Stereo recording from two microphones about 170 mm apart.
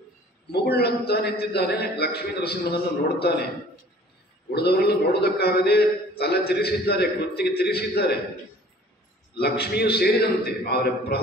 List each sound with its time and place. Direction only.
0.5 s a man's voice: 70° left (ahead or behind)
4.5 s a man's voice: 70° left (ahead or behind)
9.4 s a man's voice: 70° left (ahead or behind)